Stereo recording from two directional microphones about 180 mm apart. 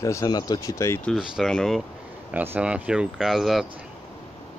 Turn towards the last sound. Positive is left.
turn(degrees=0)  # may be behind; listen again after turning